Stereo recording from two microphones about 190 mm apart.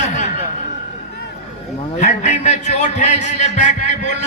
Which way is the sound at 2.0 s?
40° left (ahead or behind).